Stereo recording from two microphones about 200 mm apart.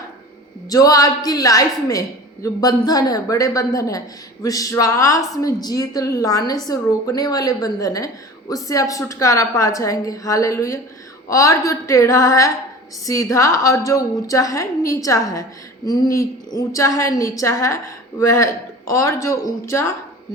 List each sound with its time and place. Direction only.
0.7 s a woman's voice: 20° left (ahead or behind)